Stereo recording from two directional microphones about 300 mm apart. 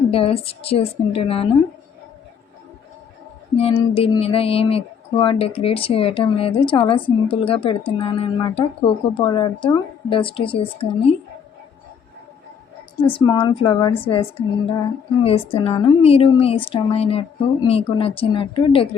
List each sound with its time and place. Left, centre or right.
0.1 s a woman's voice: centre
3.6 s a woman's voice: centre
13.1 s a woman's voice: centre